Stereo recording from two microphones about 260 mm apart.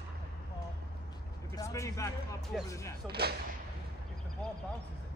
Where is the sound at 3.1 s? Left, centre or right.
Right.